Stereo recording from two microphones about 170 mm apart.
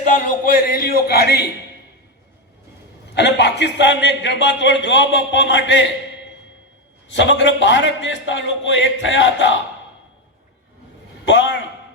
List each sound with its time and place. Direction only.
0.1 s a sound: 55° left (ahead or behind)
3.2 s a man's voice: 90° left
7.1 s a man's voice: 90° left
11.3 s a man's voice: 90° left